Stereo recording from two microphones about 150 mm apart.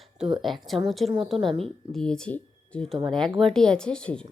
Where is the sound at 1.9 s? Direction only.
5° left (ahead or behind).